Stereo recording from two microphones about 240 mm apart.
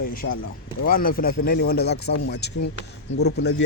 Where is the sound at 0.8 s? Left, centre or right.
Left.